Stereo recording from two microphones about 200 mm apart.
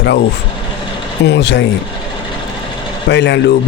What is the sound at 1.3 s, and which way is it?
Speech, 60° left (ahead or behind).